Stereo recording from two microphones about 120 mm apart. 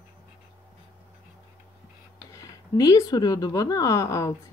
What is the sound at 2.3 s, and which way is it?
Speech, 30° left (ahead or behind).